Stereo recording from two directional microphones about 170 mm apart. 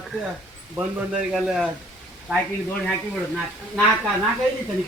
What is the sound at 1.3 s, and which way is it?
Speech, centre (ahead or behind).